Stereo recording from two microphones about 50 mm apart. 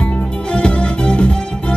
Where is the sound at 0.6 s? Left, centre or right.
Left.